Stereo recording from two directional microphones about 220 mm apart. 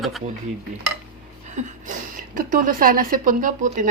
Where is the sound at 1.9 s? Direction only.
35° right (ahead or behind).